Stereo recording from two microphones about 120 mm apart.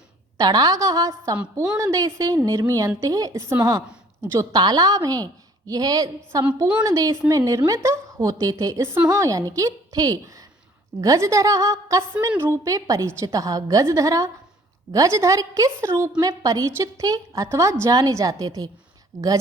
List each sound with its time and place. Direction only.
0.3 s a woman's voice: 30° right (ahead or behind)